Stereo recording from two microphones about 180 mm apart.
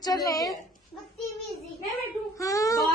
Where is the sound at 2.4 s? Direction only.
20° left (ahead or behind).